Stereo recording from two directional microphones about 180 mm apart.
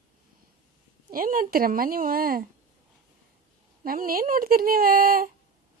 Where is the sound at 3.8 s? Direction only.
55° right (ahead or behind).